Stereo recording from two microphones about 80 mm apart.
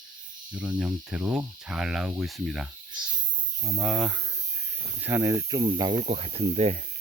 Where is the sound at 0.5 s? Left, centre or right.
Centre.